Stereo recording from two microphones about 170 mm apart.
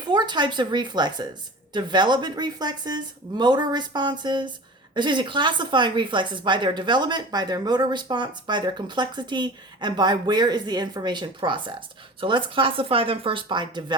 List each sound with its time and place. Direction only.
0.1 s speech: 25° right (ahead or behind)